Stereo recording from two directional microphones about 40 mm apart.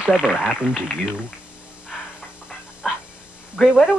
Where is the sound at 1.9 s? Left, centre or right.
Centre.